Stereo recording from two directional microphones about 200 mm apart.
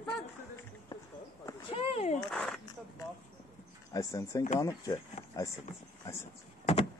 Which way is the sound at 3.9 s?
15° left (ahead or behind).